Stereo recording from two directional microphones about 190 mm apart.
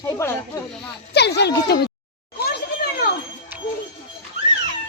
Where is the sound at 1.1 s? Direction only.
60° left (ahead or behind).